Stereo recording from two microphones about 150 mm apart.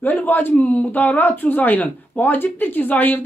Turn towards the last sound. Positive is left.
turn(degrees=10)  # may be behind; listen again after turning